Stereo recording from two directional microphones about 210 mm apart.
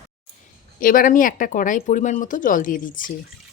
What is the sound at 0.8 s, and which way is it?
Speech, 40° left (ahead or behind).